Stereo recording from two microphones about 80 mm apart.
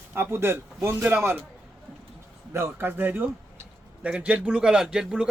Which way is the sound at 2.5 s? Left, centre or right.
Right.